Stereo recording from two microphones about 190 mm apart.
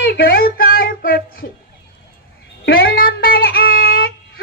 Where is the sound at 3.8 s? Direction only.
50° left (ahead or behind).